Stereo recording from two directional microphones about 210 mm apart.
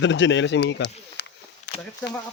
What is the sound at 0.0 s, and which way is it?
Speech, 60° left (ahead or behind).